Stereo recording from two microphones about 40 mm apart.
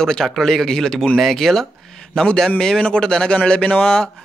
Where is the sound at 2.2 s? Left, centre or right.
Left.